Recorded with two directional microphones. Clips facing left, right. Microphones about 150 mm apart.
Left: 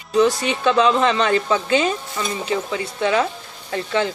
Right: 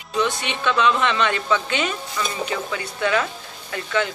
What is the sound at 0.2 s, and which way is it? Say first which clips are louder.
Speech: left 6 dB; 40° left (ahead or behind).